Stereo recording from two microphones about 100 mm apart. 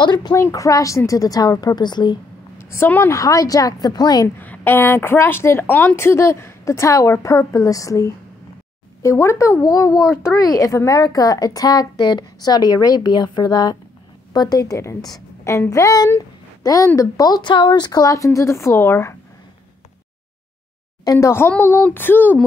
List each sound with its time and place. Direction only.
0.0 s speech: 45° left (ahead or behind)
0.3 s a woman's voice: 35° left (ahead or behind)
2.7 s a woman's voice: 25° left (ahead or behind); by 4.3 s 45° left (ahead or behind)
4.4 s a woman's voice: 20° left (ahead or behind)
21.0 s a woman's voice: 30° left (ahead or behind)